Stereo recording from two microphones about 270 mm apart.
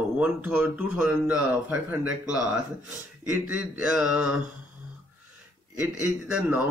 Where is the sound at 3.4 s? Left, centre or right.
Centre.